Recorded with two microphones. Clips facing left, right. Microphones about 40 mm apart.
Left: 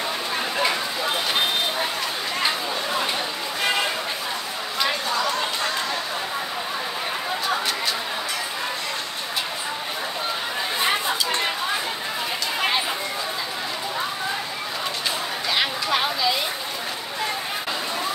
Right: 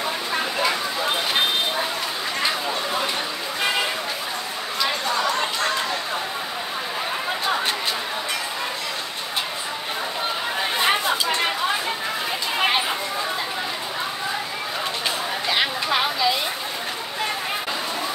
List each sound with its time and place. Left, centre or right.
10.8 s chatter: right
12.5 s a sound: right
15.5 s chatter: centre